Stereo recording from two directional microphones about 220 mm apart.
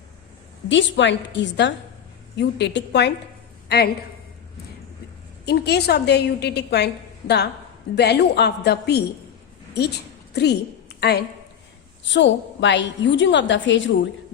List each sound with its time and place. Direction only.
0.7 s a woman's voice: 55° left (ahead or behind)
5.5 s a woman's voice: 45° left (ahead or behind)
10.3 s a woman's voice: 50° left (ahead or behind)